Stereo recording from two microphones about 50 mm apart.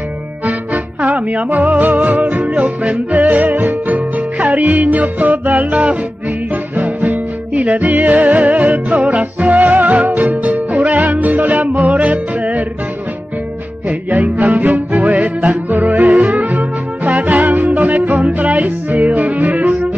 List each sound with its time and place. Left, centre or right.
1.0 s music: right
13.8 s music: right